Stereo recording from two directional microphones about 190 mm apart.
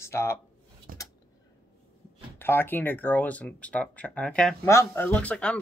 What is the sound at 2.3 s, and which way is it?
Speech, 10° left (ahead or behind).